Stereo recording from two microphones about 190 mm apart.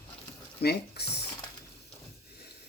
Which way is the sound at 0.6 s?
60° left (ahead or behind).